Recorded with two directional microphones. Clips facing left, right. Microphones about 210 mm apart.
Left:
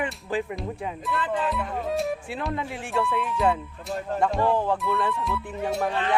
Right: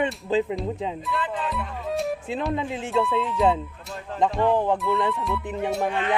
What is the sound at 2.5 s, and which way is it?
Speech, 20° right (ahead or behind).